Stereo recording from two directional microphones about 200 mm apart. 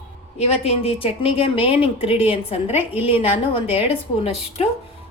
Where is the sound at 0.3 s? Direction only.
30° left (ahead or behind).